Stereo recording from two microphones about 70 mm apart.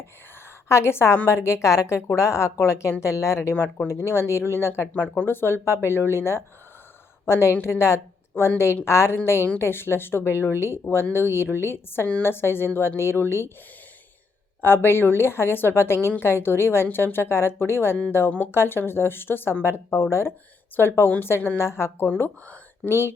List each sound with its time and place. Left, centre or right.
0.7 s speech: left
14.6 s speech: left